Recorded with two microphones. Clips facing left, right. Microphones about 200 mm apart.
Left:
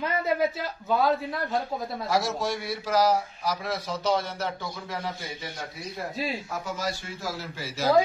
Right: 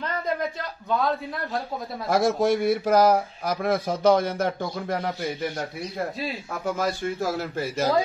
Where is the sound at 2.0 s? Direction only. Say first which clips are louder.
Right 7 dB; 55° right (ahead or behind).